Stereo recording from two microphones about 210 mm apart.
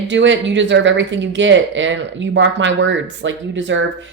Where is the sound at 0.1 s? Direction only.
60° right (ahead or behind).